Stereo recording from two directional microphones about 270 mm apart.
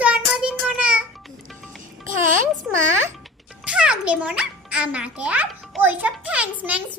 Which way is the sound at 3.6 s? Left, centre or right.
Centre.